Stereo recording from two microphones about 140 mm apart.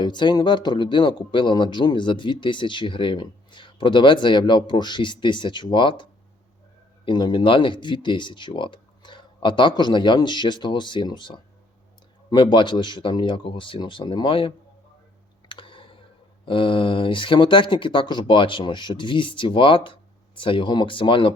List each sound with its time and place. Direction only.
0.0 s speech: 35° left (ahead or behind)
15.4 s clicking: 35° left (ahead or behind)
16.5 s speech: 40° left (ahead or behind)